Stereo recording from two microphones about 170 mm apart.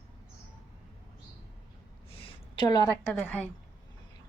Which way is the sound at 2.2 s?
25° left (ahead or behind).